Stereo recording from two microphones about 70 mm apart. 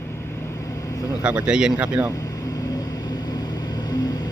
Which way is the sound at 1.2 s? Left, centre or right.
Centre.